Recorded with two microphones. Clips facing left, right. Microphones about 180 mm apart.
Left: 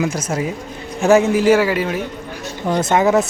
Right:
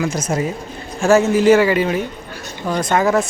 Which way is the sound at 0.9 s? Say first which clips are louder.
Even; 15° left (ahead or behind).